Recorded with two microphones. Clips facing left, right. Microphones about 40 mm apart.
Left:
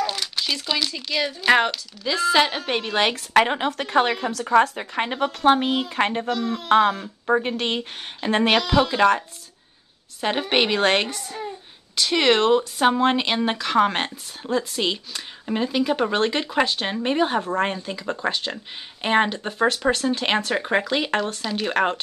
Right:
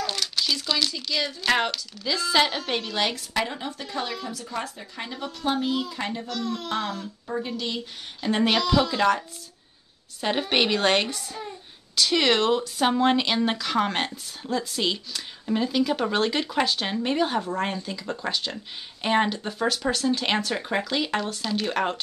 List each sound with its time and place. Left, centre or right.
0.0 s crumpling: centre
0.9 s a woman's voice: left
2.8 s speech: left
3.3 s a woman's voice: left
6.2 s speech: left
6.7 s a woman's voice: left
8.2 s speech: left
10.2 s a woman's voice: centre
11.1 s speech: left
11.9 s speech: centre
17.4 s speech: left
17.6 s a woman's voice: left
21.6 s speech: left